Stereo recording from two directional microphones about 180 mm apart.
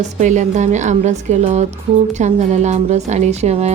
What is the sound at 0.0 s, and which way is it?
A woman's voice, 40° right (ahead or behind).